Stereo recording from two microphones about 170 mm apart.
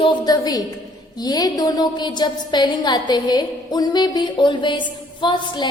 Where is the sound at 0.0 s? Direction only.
25° left (ahead or behind).